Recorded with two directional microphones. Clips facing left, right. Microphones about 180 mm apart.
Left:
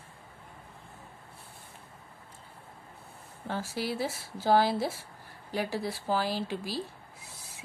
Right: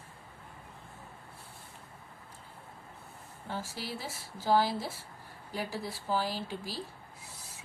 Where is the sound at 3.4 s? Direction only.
65° left (ahead or behind).